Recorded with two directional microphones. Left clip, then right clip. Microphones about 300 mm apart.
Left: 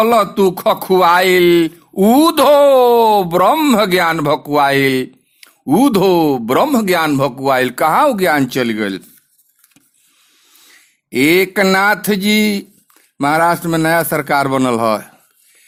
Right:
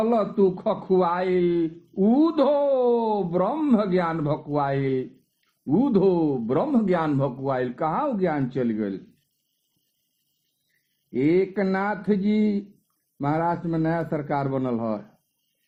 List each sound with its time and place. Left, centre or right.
0.0 s speech: left
11.1 s speech: left